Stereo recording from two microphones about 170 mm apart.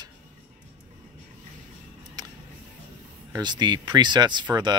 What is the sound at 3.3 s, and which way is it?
Speech, 25° right (ahead or behind).